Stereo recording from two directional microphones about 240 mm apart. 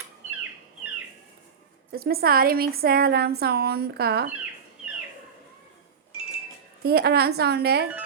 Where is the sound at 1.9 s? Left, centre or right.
Right.